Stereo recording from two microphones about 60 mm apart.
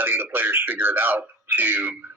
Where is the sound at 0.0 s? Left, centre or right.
Right.